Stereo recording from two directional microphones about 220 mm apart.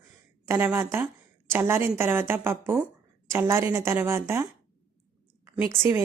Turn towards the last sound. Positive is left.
turn(degrees=-10)  # may be behind; listen again after turning